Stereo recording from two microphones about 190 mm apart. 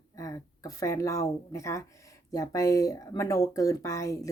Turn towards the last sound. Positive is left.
turn(degrees=15)  # may be behind; listen again after turning